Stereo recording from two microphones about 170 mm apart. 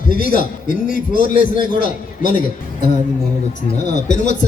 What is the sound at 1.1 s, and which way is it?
Speech, 30° right (ahead or behind).